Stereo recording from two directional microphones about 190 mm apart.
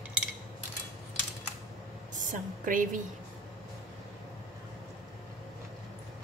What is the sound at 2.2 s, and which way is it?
Speech, 45° right (ahead or behind).